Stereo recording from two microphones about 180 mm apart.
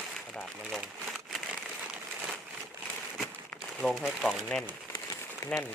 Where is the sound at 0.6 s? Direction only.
5° right (ahead or behind).